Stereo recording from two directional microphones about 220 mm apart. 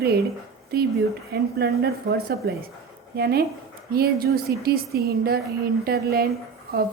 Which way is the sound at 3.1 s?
45° right (ahead or behind).